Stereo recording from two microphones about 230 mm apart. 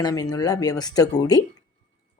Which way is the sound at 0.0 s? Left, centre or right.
Centre.